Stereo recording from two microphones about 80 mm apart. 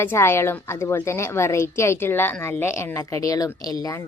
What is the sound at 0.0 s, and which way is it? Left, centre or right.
A woman's voice, left.